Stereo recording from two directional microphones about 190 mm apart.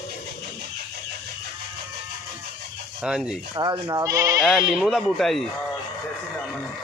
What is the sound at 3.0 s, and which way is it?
Speech, 5° right (ahead or behind).